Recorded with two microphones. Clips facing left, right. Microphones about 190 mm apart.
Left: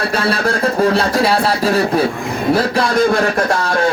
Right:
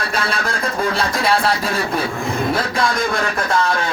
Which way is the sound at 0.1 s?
35° left (ahead or behind).